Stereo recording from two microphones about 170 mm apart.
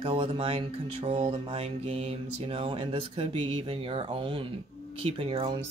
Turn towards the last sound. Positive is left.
turn(degrees=-35)  # may be behind; listen again after turning